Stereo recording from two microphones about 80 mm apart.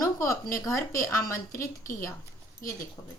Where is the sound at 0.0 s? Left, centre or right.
Left.